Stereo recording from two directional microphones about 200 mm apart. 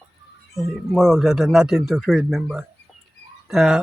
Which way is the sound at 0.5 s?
Centre (ahead or behind).